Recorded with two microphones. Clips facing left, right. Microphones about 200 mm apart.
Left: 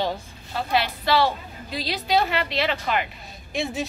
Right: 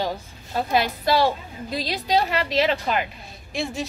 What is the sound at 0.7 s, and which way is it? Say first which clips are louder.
A woman's voice: right 1 dB; 45° right (ahead or behind).